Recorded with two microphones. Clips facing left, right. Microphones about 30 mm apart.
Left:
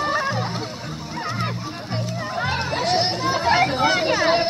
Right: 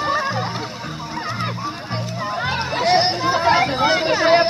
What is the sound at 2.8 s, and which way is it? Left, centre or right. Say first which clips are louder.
Chatter: right 6 dB; right.